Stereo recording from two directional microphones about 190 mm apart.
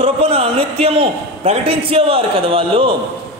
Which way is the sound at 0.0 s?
30° right (ahead or behind).